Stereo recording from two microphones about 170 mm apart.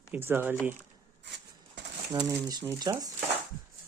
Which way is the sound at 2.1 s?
20° right (ahead or behind).